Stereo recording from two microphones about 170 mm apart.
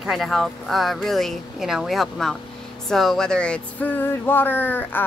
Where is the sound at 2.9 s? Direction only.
Centre (ahead or behind).